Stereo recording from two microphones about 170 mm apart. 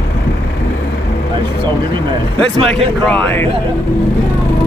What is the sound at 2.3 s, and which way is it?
Speech, 5° left (ahead or behind).